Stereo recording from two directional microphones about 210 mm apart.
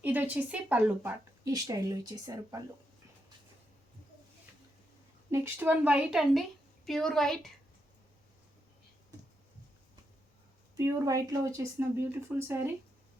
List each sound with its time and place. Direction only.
0.0 s speech: 10° right (ahead or behind)
5.3 s a woman's voice: 10° right (ahead or behind)
10.8 s speech: 15° right (ahead or behind)